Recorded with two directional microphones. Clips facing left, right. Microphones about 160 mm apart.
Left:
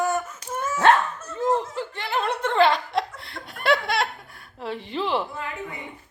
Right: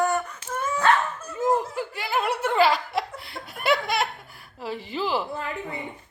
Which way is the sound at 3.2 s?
Centre (ahead or behind).